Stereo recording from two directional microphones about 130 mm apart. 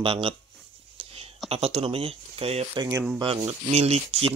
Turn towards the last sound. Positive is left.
turn(degrees=-50)  # may be behind; listen again after turning